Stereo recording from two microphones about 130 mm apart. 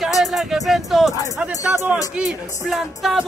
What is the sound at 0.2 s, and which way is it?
Speech, centre (ahead or behind).